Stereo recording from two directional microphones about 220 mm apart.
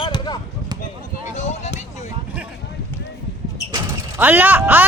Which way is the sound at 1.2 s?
30° left (ahead or behind).